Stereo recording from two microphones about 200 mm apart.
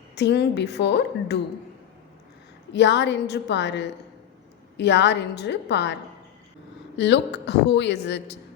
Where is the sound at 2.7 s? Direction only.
60° left (ahead or behind).